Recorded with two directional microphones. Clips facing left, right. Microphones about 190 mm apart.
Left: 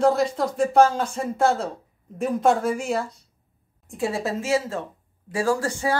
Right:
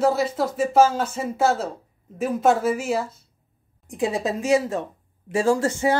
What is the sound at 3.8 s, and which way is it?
A woman's voice, 15° right (ahead or behind).